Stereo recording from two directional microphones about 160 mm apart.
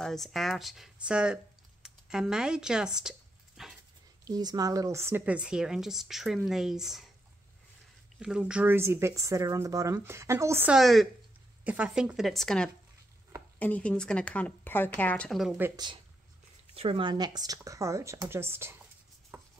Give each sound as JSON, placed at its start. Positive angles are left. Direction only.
{"t": 0.0, "sound": "speech", "side_deg": 0}
{"t": 4.2, "sound": "speech", "side_deg": -25}
{"t": 8.2, "sound": "speech", "side_deg": -5}
{"t": 10.7, "sound": "speech", "side_deg": 0}
{"t": 15.7, "sound": "speech", "side_deg": -25}
{"t": 19.3, "sound": "a sound", "side_deg": -15}